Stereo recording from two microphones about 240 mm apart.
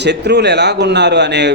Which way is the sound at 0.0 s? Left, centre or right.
Right.